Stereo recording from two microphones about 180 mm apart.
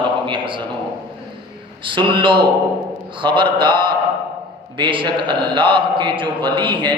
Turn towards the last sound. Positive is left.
turn(degrees=-25)  # may be behind; listen again after turning